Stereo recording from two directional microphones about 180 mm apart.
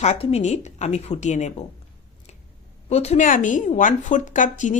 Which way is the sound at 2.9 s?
40° left (ahead or behind).